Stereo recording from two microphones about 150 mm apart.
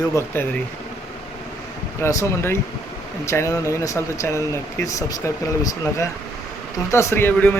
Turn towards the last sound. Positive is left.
turn(degrees=15)  # may be behind; listen again after turning